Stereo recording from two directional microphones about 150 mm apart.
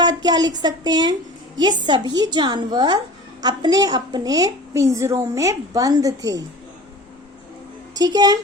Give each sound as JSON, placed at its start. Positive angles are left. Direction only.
{"t": 0.0, "sound": "a woman's voice", "side_deg": -25}
{"t": 7.9, "sound": "a woman's voice", "side_deg": -25}